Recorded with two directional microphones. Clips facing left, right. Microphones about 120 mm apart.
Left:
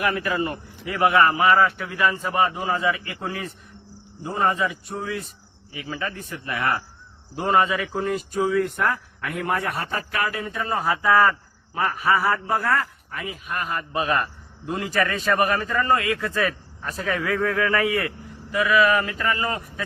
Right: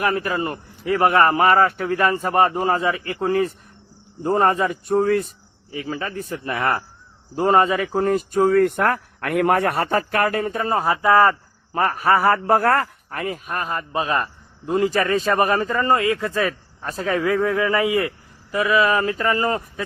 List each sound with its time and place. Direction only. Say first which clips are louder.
0.0 s a man's voice: right 2 dB; 35° right (ahead or behind); by 12.9 s 65° right (ahead or behind)
13.1 s a man's voice: right 5 dB; 50° right (ahead or behind); by 18.1 s 20° right (ahead or behind)
18.5 s a man's voice: right 1 dB; 30° right (ahead or behind)